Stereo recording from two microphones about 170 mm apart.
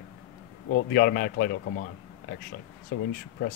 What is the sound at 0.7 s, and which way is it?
A man's voice, 70° left (ahead or behind).